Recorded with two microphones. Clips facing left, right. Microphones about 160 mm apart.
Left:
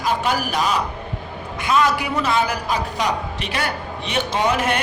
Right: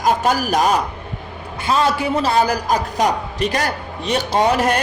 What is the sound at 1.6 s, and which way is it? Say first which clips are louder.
A man's voice: right 1 dB; 30° right (ahead or behind).